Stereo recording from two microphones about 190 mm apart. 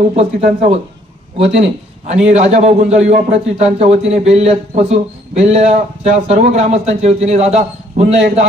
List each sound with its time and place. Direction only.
0.1 s speech: 30° right (ahead or behind)
2.2 s speech: 35° right (ahead or behind)